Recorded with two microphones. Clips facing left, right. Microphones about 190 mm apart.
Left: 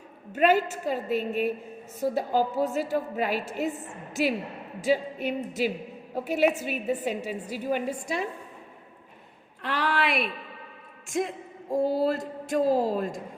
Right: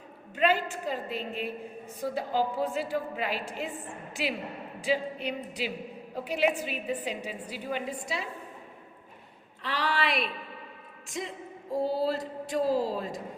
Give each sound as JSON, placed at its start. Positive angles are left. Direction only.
{"t": 0.3, "sound": "a woman's voice", "side_deg": 45}
{"t": 9.6, "sound": "a sound", "side_deg": 55}
{"t": 11.1, "sound": "a woman's voice", "side_deg": 50}